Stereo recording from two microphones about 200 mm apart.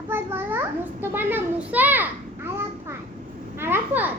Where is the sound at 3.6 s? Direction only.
10° right (ahead or behind).